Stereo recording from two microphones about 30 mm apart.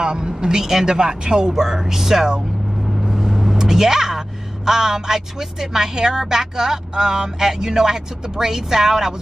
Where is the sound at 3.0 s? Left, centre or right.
Centre.